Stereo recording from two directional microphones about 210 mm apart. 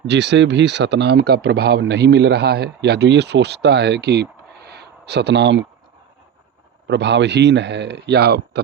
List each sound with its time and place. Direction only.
0.1 s speech: 55° right (ahead or behind)
6.8 s a man's voice: 55° right (ahead or behind)